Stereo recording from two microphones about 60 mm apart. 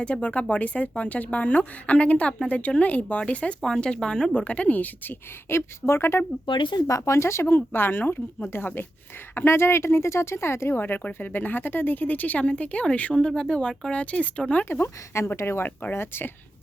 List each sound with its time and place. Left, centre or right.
0.0 s speech: left
4.4 s speech: left
5.5 s speech: left
6.8 s speech: left
7.4 s speech: left
14.6 s speech: left
15.1 s speech: left